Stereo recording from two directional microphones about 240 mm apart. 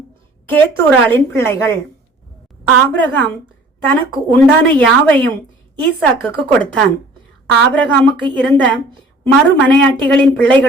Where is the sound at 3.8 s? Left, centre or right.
Centre.